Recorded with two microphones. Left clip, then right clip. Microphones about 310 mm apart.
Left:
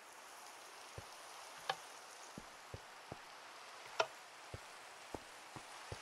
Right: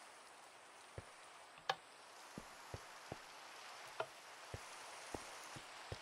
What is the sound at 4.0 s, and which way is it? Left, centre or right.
Tick, left.